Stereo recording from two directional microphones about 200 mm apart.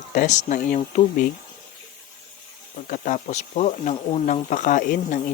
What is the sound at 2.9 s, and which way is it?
Speech, 40° left (ahead or behind).